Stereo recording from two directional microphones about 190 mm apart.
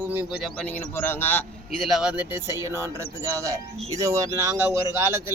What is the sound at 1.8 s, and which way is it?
Speech, centre (ahead or behind).